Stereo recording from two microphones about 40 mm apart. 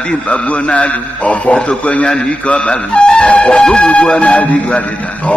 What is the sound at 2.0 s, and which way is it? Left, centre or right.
Speech, centre.